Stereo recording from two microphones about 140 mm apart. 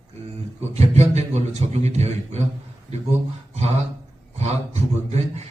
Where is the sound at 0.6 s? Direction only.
50° right (ahead or behind).